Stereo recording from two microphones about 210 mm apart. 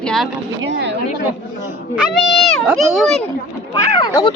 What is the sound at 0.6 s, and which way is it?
Speech, 55° right (ahead or behind).